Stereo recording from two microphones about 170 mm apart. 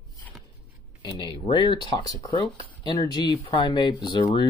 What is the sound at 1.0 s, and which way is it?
Speech, 25° left (ahead or behind).